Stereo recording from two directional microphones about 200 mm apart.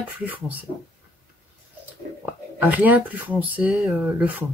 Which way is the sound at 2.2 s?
10° right (ahead or behind).